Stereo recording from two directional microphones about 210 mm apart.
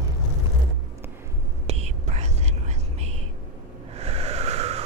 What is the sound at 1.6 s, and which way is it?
Whispering, 30° right (ahead or behind).